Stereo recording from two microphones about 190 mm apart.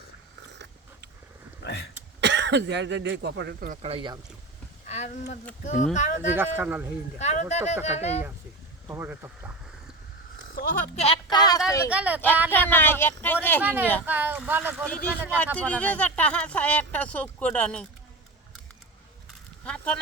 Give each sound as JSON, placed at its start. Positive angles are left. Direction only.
{"t": 1.6, "sound": "speech", "side_deg": 60}
{"t": 2.2, "sound": "speech", "side_deg": -65}
{"t": 3.7, "sound": "speech", "side_deg": -35}
{"t": 4.9, "sound": "speech", "side_deg": 40}
{"t": 6.3, "sound": "speech", "side_deg": -10}
{"t": 7.2, "sound": "speech", "side_deg": 35}
{"t": 8.9, "sound": "speech", "side_deg": -10}
{"t": 10.5, "sound": "a sound", "side_deg": 50}
{"t": 10.9, "sound": "a sound", "side_deg": 30}
{"t": 11.9, "sound": "speech", "side_deg": -5}
{"t": 12.5, "sound": "speech", "side_deg": 10}
{"t": 13.6, "sound": "speech", "side_deg": -10}
{"t": 15.5, "sound": "speech", "side_deg": 5}
{"t": 19.6, "sound": "speech", "side_deg": 5}